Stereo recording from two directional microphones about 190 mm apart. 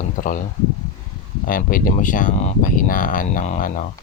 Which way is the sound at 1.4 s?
50° left (ahead or behind).